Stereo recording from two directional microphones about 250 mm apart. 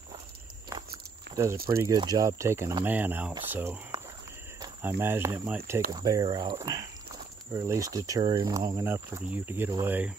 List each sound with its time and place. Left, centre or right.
1.3 s speech: centre